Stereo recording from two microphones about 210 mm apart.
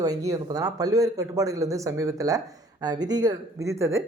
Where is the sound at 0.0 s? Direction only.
15° right (ahead or behind).